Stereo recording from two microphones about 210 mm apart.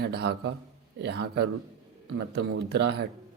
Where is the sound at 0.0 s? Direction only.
50° right (ahead or behind).